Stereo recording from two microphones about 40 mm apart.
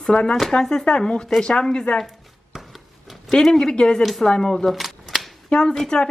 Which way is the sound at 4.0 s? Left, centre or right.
Centre.